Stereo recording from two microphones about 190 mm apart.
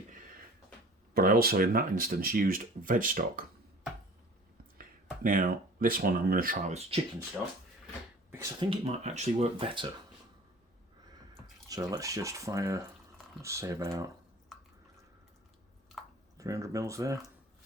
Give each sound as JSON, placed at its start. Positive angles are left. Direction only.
{"t": 1.1, "sound": "speech", "side_deg": -50}
{"t": 4.8, "sound": "speech", "side_deg": -50}
{"t": 8.6, "sound": "speech", "side_deg": -35}
{"t": 11.7, "sound": "speech", "side_deg": -20}
{"t": 14.5, "sound": "drip", "side_deg": 0}
{"t": 16.4, "sound": "speech", "side_deg": -15}